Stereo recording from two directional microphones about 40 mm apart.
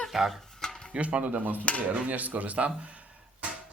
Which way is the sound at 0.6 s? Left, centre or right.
Centre.